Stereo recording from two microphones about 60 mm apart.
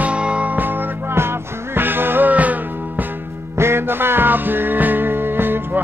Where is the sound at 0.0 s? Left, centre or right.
Centre.